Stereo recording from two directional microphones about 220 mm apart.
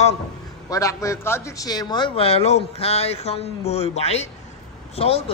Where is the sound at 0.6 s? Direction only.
15° left (ahead or behind).